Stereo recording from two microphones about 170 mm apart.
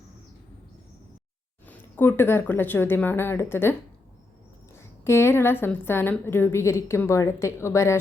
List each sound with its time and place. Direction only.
2.0 s a woman's voice: 15° left (ahead or behind)